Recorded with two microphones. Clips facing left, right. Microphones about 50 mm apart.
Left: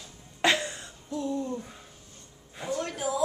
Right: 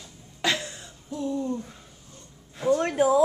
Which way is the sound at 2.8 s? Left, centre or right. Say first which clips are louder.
Right 8 dB; right.